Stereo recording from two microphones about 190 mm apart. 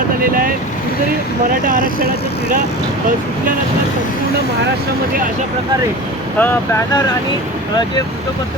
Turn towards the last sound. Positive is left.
turn(degrees=10)  # may be behind; listen again after turning